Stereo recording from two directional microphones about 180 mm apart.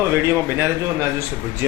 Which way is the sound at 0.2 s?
15° right (ahead or behind).